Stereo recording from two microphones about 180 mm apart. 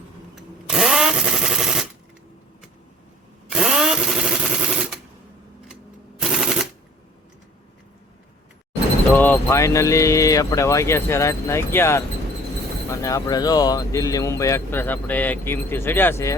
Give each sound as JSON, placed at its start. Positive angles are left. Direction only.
{"t": 0.7, "sound": "drill", "side_deg": 0}
{"t": 3.5, "sound": "a sound", "side_deg": -5}
{"t": 6.1, "sound": "machine gun", "side_deg": 0}
{"t": 9.1, "sound": "speech", "side_deg": 10}